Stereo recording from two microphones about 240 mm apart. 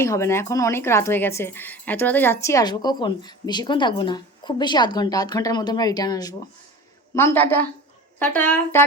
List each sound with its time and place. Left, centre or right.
0.0 s speech: centre